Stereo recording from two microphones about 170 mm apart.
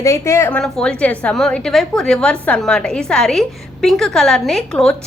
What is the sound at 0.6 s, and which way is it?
A woman's voice, 5° left (ahead or behind).